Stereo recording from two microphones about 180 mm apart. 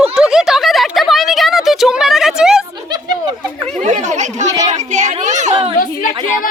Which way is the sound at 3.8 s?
40° right (ahead or behind).